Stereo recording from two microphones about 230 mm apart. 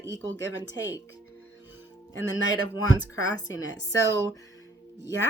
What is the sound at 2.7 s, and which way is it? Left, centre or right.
Speech, centre.